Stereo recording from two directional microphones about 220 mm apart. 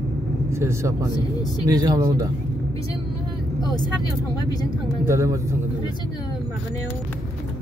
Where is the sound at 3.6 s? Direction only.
15° left (ahead or behind).